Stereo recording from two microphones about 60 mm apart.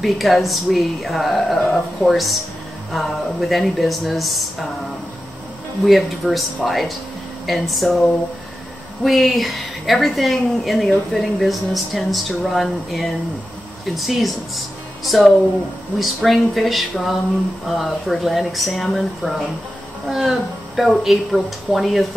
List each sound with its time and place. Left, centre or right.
0.0 s speech: centre